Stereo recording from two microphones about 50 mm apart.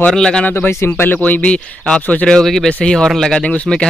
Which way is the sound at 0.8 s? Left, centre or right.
Left.